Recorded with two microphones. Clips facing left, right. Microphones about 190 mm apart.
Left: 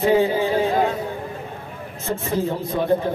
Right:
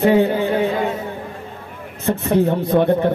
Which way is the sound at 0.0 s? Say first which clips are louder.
Right 3 dB; 65° right (ahead or behind).